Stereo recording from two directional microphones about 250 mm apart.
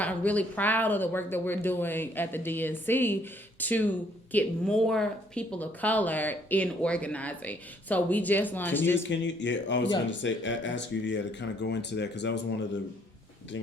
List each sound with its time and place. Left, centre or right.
0.0 s speech: centre
9.0 s speech: left